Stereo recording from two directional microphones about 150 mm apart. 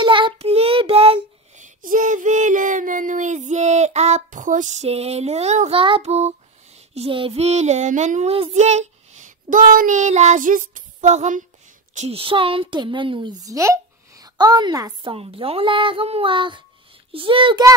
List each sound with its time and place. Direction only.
0.0 s child singing: 35° right (ahead or behind)
1.8 s child singing: 60° right (ahead or behind)
4.8 s speech: 45° right (ahead or behind)
5.8 s a woman's voice: 35° right (ahead or behind)
6.9 s child singing: 40° right (ahead or behind)
11.9 s a woman's voice: 45° right (ahead or behind)